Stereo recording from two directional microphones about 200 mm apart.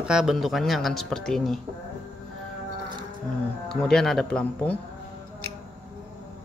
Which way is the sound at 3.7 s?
5° left (ahead or behind).